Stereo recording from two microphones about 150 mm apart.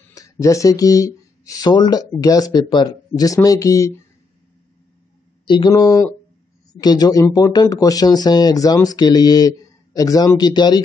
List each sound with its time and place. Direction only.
0.1 s speech: 20° left (ahead or behind)
5.4 s a sound: 30° left (ahead or behind)
5.7 s speech: 25° left (ahead or behind)